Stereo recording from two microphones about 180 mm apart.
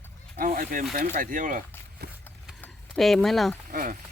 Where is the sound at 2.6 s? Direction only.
Centre (ahead or behind).